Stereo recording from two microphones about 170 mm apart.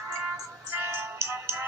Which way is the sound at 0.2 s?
10° right (ahead or behind).